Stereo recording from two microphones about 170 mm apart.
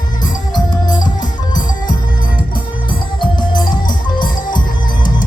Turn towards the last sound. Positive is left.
turn(degrees=25)  # may be behind; listen again after turning